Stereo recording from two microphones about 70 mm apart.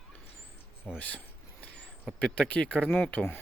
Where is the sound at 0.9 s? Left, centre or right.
Left.